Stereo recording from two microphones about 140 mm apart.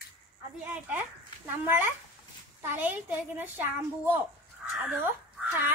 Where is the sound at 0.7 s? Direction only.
15° right (ahead or behind).